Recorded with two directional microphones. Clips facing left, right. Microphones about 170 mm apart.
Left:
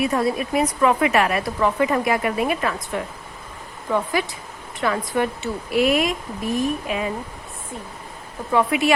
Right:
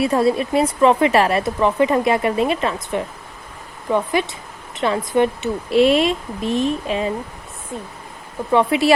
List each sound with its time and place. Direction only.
0.0 s speech: 30° right (ahead or behind)
8.5 s speech: 30° right (ahead or behind)